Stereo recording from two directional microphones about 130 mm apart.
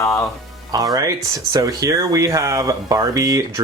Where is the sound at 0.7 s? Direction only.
30° right (ahead or behind).